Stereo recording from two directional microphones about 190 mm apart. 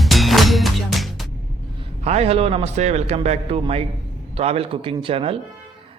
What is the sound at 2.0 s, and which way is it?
A man's voice, 35° right (ahead or behind).